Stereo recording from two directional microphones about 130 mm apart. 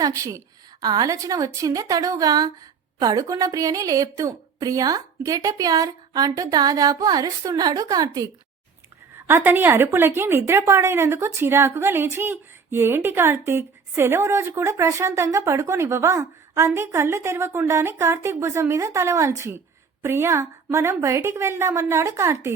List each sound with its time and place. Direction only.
0.0 s speech: 25° right (ahead or behind)
9.2 s speech: 15° right (ahead or behind)